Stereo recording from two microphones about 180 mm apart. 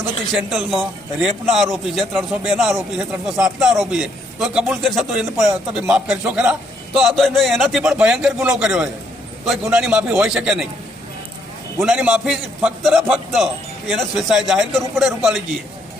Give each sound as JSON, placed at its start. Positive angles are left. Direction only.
{"t": 0.3, "sound": "a man's voice", "side_deg": 0}
{"t": 11.8, "sound": "a man's voice", "side_deg": -5}